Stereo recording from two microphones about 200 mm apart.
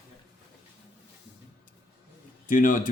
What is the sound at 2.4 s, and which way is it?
Speech, 40° left (ahead or behind).